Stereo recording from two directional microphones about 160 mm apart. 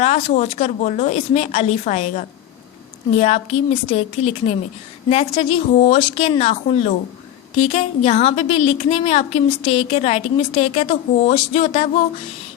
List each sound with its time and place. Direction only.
0.0 s a woman's voice: 45° left (ahead or behind)